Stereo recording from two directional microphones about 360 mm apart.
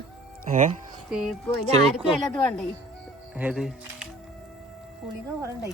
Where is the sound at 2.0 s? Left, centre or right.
Centre.